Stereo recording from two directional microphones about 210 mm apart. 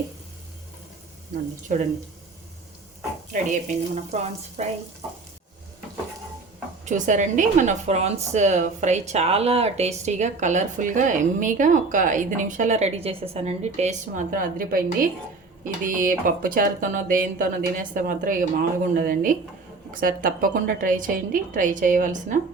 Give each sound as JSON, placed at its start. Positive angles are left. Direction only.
{"t": 1.6, "sound": "a woman's voice", "side_deg": -35}
{"t": 3.3, "sound": "a woman's voice", "side_deg": -35}
{"t": 6.8, "sound": "a woman's voice", "side_deg": -35}